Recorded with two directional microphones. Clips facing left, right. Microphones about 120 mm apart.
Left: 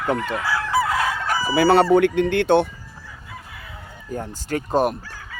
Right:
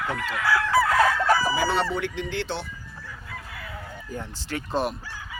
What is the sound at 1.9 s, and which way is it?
Speech, 55° left (ahead or behind).